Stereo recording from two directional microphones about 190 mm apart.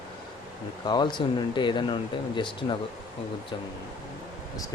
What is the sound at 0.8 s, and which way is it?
Speech, 25° left (ahead or behind).